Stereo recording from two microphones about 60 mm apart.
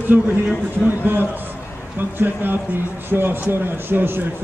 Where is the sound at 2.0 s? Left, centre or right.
Right.